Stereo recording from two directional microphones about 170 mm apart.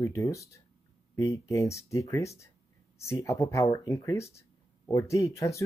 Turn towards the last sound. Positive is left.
turn(degrees=20)  # may be behind; listen again after turning